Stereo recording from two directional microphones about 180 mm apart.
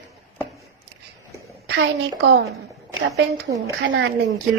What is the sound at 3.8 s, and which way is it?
Speech, 80° right.